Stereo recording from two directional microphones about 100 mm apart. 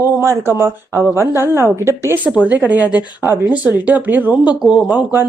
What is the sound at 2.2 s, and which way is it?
A woman's voice, 10° right (ahead or behind).